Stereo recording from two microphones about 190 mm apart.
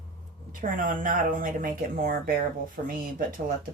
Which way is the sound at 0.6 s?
45° right (ahead or behind).